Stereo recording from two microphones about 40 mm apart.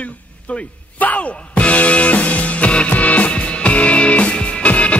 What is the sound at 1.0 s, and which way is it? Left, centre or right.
Music, left.